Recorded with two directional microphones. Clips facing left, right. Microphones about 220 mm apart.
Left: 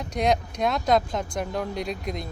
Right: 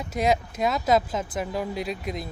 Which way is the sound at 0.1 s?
5° right (ahead or behind).